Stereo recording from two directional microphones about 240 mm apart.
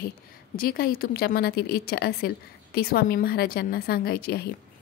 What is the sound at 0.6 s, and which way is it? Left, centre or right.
Speech, left.